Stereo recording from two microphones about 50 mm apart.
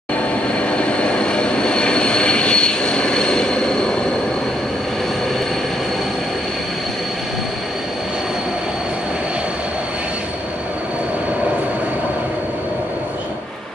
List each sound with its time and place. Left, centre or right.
0.6 s train: left